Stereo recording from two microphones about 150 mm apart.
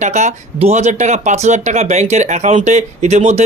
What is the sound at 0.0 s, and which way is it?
Speech, 50° right (ahead or behind).